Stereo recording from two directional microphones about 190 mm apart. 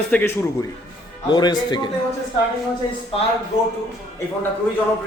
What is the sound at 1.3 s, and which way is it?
Speech, 25° left (ahead or behind).